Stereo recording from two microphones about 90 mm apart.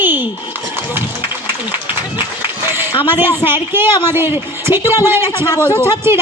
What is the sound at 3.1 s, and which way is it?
A man's voice, 25° right (ahead or behind).